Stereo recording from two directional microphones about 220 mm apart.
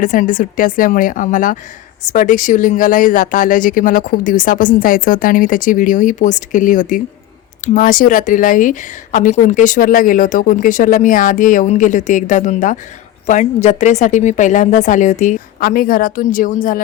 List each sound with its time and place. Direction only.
0.0 s speech: 35° left (ahead or behind)